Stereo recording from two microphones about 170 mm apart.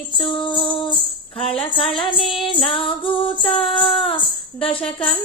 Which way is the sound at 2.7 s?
30° left (ahead or behind).